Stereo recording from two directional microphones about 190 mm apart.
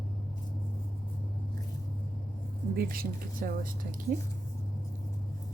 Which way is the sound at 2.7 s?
50° right (ahead or behind).